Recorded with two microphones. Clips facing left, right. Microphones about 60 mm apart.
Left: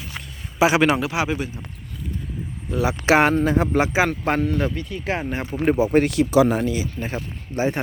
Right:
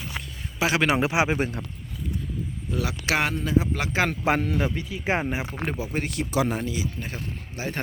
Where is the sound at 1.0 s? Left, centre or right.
Right.